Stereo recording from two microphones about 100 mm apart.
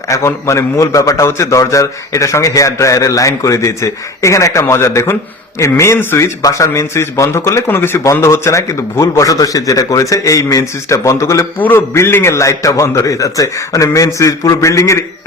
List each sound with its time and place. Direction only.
0.1 s a man's voice: 30° left (ahead or behind)